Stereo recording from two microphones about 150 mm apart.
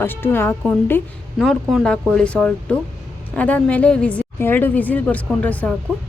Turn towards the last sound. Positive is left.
turn(degrees=10)  # may be behind; listen again after turning